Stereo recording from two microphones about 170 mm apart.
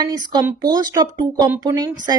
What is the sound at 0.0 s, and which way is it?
A woman's voice, 25° right (ahead or behind).